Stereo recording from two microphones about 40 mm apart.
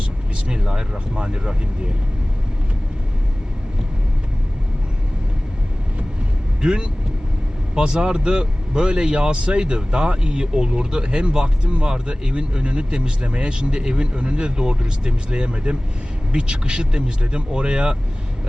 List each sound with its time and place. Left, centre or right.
0.4 s speech: right
6.6 s speech: right